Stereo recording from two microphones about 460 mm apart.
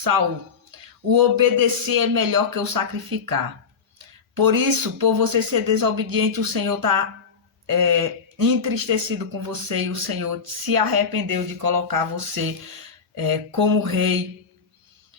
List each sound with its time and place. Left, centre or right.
0.7 s speech: right